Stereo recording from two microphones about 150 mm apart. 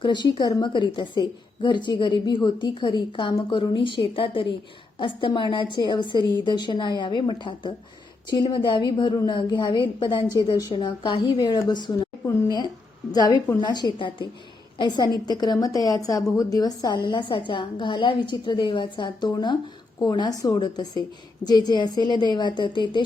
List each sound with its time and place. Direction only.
0.0 s a woman's voice: 30° left (ahead or behind)
13.1 s a woman's voice: 25° left (ahead or behind)